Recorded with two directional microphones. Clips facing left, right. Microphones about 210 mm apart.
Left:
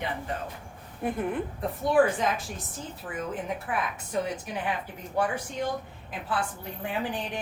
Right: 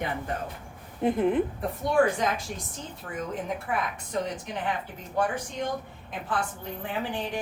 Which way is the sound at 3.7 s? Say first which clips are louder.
Even; centre (ahead or behind).